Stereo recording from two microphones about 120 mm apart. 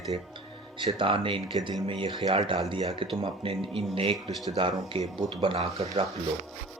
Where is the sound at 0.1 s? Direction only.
50° right (ahead or behind).